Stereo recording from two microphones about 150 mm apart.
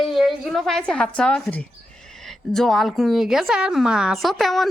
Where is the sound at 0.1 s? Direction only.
Centre (ahead or behind).